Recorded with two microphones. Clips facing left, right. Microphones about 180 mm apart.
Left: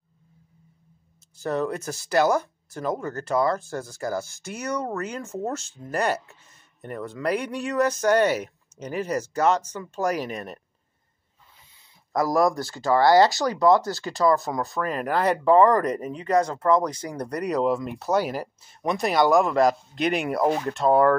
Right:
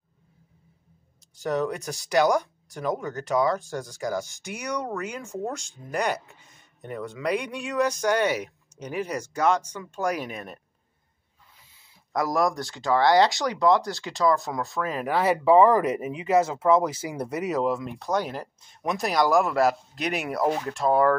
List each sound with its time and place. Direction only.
1.4 s speech: centre (ahead or behind)
4.5 s speech: 15° right (ahead or behind)
6.8 s speech: centre (ahead or behind)
8.2 s speech: 10° right (ahead or behind)
9.1 s speech: 5° left (ahead or behind)
10.1 s speech: 5° right (ahead or behind)
11.8 s speech: centre (ahead or behind)